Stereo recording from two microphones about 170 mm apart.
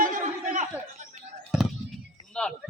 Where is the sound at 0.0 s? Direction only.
50° right (ahead or behind).